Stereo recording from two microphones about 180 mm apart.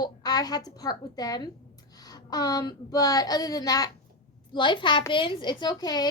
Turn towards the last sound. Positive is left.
turn(degrees=20)  # may be behind; listen again after turning